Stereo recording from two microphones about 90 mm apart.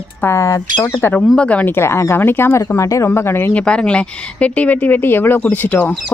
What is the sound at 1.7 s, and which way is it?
Speech, 30° left (ahead or behind).